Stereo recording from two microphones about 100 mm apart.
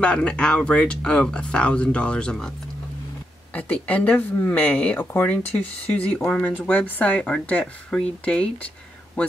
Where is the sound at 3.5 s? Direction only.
15° left (ahead or behind).